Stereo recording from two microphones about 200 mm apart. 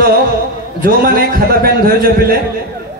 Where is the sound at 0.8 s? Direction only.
50° right (ahead or behind).